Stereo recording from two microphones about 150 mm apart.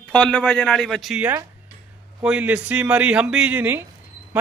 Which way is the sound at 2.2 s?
10° right (ahead or behind).